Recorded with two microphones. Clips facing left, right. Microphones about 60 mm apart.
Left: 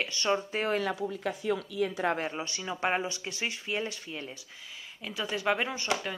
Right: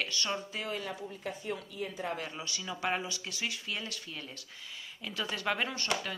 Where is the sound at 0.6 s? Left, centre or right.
Left.